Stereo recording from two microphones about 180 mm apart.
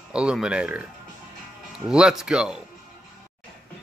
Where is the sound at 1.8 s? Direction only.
5° right (ahead or behind).